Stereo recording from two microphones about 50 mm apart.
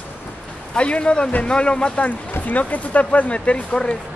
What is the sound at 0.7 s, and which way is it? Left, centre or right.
Speech, left.